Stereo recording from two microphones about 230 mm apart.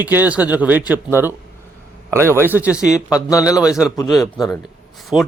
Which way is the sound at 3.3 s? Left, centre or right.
Centre.